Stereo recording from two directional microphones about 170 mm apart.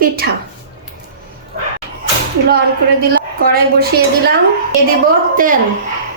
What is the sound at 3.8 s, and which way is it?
Speech, 65° right (ahead or behind).